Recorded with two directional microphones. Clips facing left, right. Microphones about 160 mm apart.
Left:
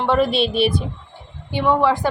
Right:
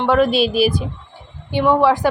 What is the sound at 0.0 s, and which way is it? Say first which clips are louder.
Speech: right 3 dB; centre (ahead or behind).